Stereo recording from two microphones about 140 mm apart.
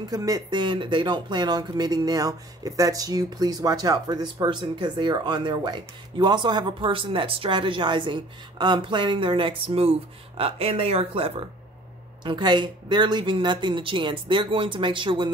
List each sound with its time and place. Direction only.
0.1 s speech: 25° right (ahead or behind)